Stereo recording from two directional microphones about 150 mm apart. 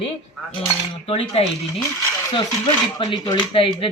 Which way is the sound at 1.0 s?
40° left (ahead or behind).